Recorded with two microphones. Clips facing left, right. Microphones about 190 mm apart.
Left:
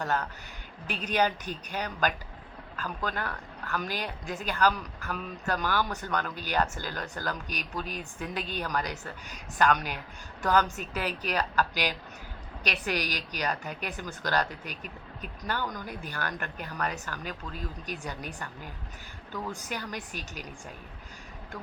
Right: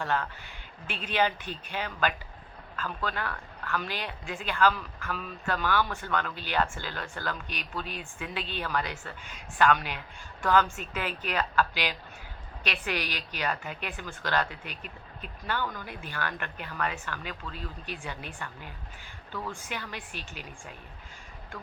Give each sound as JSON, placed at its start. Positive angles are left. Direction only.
{"t": 0.0, "sound": "speech", "side_deg": 40}
{"t": 19.3, "sound": "speech", "side_deg": 15}
{"t": 19.5, "sound": "speech", "side_deg": 40}